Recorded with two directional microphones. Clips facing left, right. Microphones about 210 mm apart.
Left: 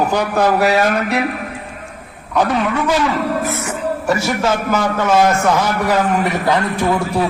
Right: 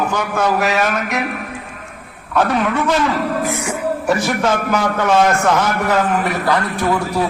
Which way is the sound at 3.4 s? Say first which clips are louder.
Right 1 dB; 15° right (ahead or behind).